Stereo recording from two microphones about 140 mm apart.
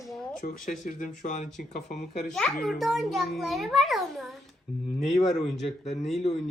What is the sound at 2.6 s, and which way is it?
A child's voice, centre (ahead or behind).